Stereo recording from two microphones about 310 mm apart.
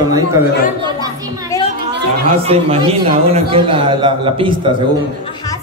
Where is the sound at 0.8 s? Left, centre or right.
Centre.